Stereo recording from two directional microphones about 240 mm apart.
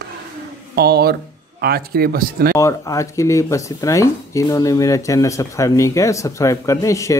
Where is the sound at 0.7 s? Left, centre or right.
Right.